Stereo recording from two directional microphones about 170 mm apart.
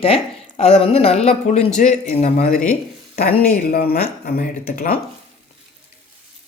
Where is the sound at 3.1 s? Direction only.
60° left (ahead or behind).